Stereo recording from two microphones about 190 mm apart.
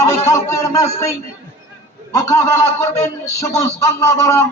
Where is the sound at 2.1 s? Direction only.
15° left (ahead or behind).